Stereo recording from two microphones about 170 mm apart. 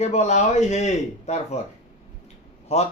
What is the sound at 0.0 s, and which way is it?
A man's voice, 40° left (ahead or behind).